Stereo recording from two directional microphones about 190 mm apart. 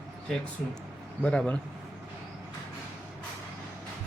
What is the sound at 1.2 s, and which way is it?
Speech, 5° left (ahead or behind).